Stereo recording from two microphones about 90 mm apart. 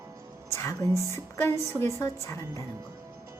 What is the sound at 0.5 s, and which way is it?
A woman's voice, 35° left (ahead or behind).